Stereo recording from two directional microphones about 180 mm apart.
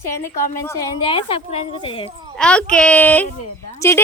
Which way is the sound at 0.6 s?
15° left (ahead or behind).